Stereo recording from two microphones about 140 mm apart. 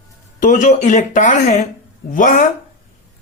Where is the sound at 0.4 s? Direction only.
65° left (ahead or behind).